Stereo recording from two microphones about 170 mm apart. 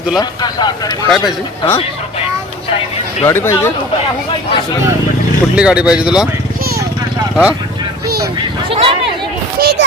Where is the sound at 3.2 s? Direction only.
15° left (ahead or behind).